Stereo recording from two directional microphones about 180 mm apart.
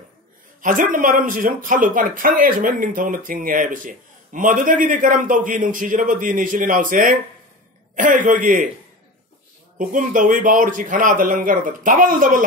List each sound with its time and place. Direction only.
0.6 s speech: 50° right (ahead or behind)
9.8 s speech: 45° right (ahead or behind)